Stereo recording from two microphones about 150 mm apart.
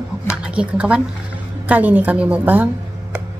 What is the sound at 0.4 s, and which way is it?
A woman's voice, 10° right (ahead or behind).